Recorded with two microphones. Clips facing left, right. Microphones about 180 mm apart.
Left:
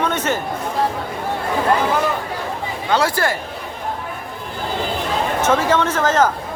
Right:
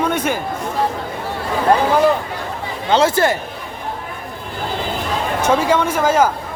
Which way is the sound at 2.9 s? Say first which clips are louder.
Right 4 dB; 20° right (ahead or behind).